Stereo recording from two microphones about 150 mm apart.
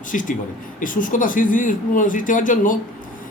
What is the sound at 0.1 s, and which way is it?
A man's voice, 60° left (ahead or behind).